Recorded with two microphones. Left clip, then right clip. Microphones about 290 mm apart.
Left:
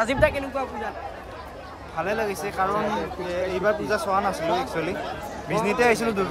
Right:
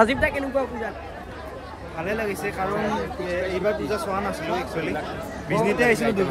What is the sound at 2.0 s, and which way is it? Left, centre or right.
Speech, centre.